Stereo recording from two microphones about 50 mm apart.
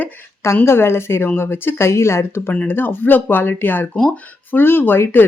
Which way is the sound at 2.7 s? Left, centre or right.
Left.